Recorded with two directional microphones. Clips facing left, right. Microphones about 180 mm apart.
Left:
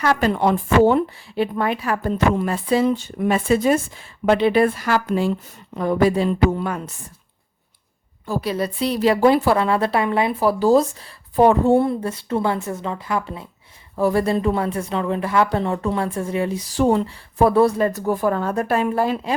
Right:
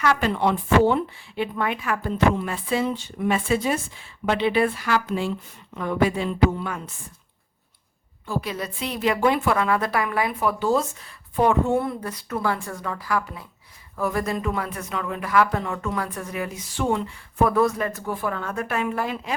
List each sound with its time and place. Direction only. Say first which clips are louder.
0.0 s speech: left 3 dB; 40° left (ahead or behind)
8.3 s a woman's voice: left 6 dB; 35° left (ahead or behind)